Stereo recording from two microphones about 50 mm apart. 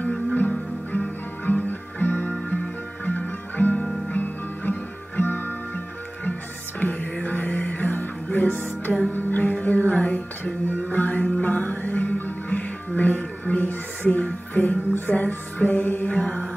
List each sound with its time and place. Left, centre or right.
0.0 s music: left
7.2 s music: left
15.9 s mantra: left
16.2 s mantra: left